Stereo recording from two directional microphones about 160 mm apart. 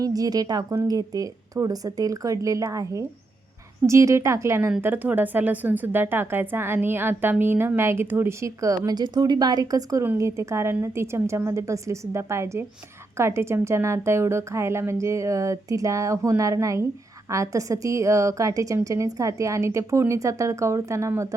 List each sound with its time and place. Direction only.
0.0 s a woman's voice: 25° right (ahead or behind)